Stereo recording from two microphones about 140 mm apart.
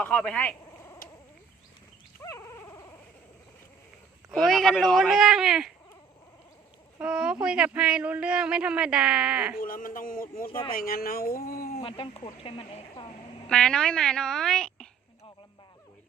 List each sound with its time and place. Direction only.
0.0 s speech: 5° left (ahead or behind)
2.2 s dog: 20° left (ahead or behind)
4.3 s speech: centre (ahead or behind)
7.0 s speech: 5° right (ahead or behind)
9.6 s speech: 85° left
11.8 s speech: 40° left (ahead or behind)
13.5 s speech: 5° left (ahead or behind)